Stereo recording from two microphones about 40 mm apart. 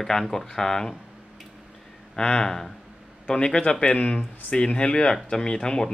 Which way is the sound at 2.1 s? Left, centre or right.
Left.